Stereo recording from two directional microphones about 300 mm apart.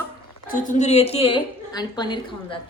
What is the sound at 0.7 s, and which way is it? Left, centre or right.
A woman's voice, left.